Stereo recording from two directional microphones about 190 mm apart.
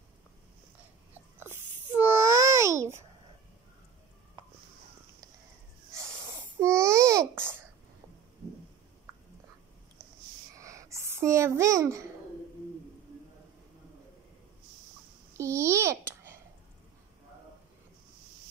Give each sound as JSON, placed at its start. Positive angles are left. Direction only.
{"t": 1.4, "sound": "babbling", "side_deg": -10}
{"t": 5.9, "sound": "wheeze", "side_deg": -15}
{"t": 6.8, "sound": "babbling", "side_deg": -15}
{"t": 10.5, "sound": "a sound", "side_deg": -15}
{"t": 15.3, "sound": "babbling", "side_deg": -15}